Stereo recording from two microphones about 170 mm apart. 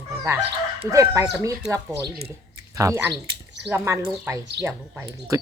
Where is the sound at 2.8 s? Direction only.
15° right (ahead or behind).